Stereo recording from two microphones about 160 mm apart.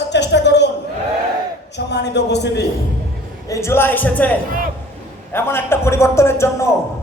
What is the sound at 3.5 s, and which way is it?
Speech, 15° left (ahead or behind).